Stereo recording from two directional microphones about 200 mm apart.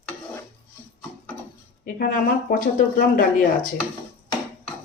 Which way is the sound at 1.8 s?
45° left (ahead or behind).